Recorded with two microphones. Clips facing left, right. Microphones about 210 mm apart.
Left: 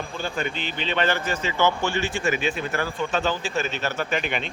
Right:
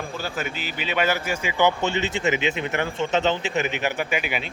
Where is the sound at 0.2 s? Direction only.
5° right (ahead or behind).